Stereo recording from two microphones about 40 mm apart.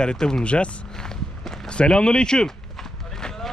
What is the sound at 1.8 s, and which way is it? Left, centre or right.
Speech, left.